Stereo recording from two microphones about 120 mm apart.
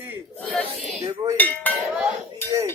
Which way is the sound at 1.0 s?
30° right (ahead or behind).